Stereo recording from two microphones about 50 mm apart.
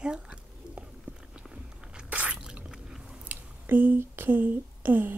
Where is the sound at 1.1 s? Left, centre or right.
Right.